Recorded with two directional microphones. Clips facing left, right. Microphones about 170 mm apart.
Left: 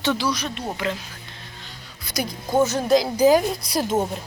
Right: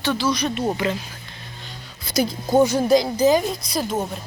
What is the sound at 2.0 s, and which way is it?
Speech, 25° right (ahead or behind).